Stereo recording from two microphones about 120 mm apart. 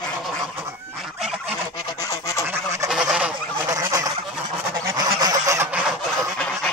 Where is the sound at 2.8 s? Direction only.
5° right (ahead or behind).